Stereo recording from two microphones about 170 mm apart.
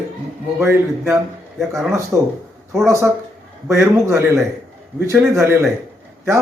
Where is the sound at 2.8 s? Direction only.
15° right (ahead or behind).